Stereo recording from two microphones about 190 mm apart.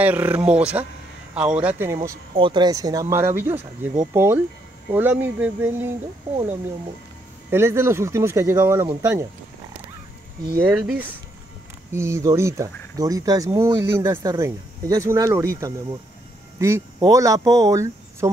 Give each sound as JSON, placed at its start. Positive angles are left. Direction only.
{"t": 0.0, "sound": "speech", "side_deg": -10}
{"t": 2.3, "sound": "speech", "side_deg": -25}
{"t": 7.5, "sound": "speech", "side_deg": -15}
{"t": 10.6, "sound": "speech", "side_deg": -5}